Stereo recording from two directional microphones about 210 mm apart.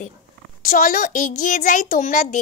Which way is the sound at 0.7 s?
40° left (ahead or behind).